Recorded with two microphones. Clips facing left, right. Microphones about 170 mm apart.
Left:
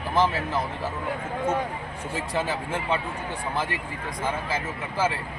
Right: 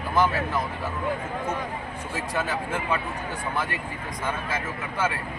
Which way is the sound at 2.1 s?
30° left (ahead or behind).